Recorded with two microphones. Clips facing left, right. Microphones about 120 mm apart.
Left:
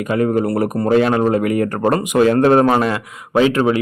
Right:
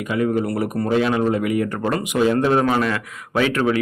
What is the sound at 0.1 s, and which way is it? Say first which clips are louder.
Speech: left 4 dB; 45° left (ahead or behind).